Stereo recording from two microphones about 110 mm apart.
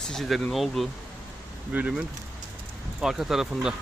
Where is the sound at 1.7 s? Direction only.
10° right (ahead or behind).